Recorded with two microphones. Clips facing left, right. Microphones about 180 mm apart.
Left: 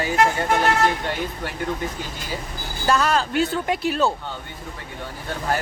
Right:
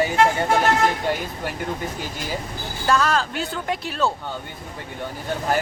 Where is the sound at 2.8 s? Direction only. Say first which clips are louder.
Even; 5° left (ahead or behind).